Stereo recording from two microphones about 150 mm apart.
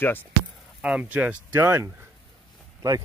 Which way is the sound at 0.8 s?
10° right (ahead or behind).